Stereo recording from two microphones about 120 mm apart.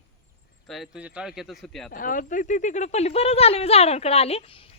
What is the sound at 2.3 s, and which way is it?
A woman's voice, 90° left.